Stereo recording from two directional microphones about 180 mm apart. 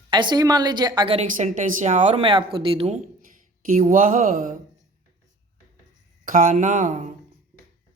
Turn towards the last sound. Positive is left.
turn(degrees=-45)  # may be behind; listen again after turning